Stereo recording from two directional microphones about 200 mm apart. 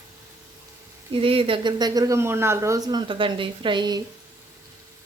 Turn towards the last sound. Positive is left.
turn(degrees=-20)  # may be behind; listen again after turning